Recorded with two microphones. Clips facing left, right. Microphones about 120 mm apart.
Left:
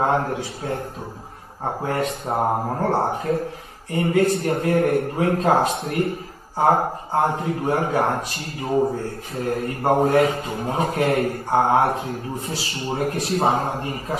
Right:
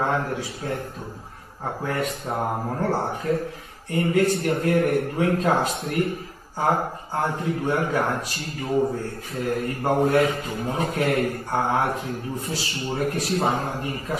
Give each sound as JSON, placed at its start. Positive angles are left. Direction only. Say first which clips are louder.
{"t": 0.0, "sound": "a man's voice", "louder": "left 3 dB", "side_deg": 35}